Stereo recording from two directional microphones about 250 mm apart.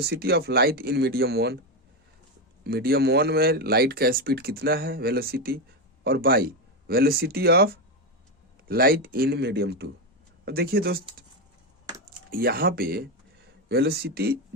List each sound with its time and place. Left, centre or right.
0.0 s speech: right
2.6 s speech: right
12.3 s speech: right